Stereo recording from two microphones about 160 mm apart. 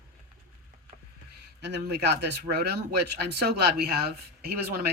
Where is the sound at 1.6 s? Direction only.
90° right.